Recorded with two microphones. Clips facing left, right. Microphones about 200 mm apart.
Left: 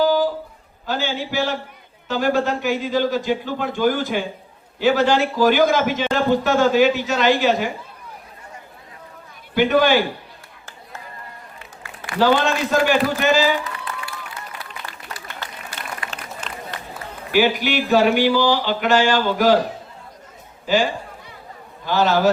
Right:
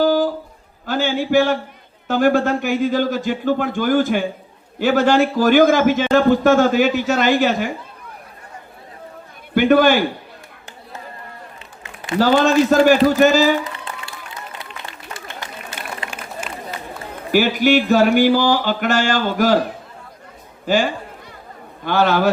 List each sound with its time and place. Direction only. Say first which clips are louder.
0.0 s a sound: right 2 dB; 50° right (ahead or behind)
0.9 s a man's voice: right 5 dB; 50° right (ahead or behind)
9.6 s a man's voice: right 3 dB; 50° right (ahead or behind)
11.6 s a sound: even; 20° right (ahead or behind)
12.2 s a man's voice: right 4 dB; 45° right (ahead or behind)
13.7 s applause: left 1 dB; 25° right (ahead or behind)
15.7 s run: right 2 dB; 25° right (ahead or behind)
16.0 s a sound: right 3 dB; 10° right (ahead or behind)
17.3 s a man's voice: right 4 dB; 45° right (ahead or behind)
20.7 s a man's voice: right 1 dB; 50° right (ahead or behind)